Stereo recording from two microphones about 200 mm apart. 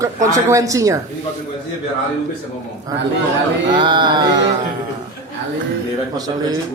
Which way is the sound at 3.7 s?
20° right (ahead or behind).